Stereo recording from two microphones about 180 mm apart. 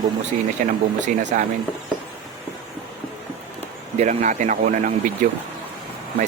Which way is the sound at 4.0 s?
45° right (ahead or behind).